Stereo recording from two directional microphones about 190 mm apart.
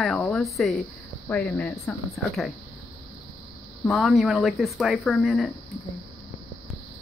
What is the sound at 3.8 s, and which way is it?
Speech, centre (ahead or behind).